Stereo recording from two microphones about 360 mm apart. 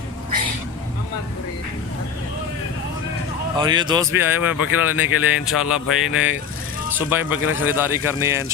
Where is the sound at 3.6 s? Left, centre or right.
Centre.